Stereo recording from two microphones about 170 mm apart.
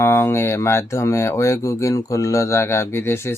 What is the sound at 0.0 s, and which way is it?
Speech, 15° left (ahead or behind).